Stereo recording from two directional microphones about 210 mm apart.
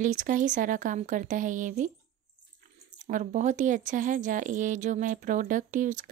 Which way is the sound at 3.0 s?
35° right (ahead or behind).